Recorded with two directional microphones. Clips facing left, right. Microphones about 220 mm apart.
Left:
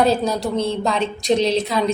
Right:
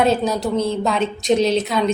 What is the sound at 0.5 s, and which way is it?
Speech, 30° left (ahead or behind).